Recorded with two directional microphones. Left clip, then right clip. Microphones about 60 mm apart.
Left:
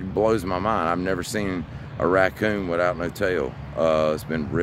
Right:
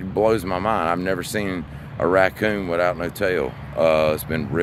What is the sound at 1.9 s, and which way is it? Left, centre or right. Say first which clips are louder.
Speech: right 2 dB; centre.